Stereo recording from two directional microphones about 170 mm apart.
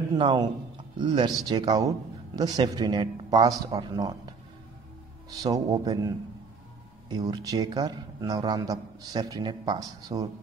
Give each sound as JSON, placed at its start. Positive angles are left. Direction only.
{"t": 0.1, "sound": "a man's voice", "side_deg": -25}